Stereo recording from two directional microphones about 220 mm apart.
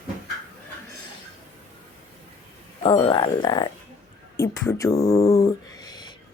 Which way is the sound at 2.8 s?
20° left (ahead or behind).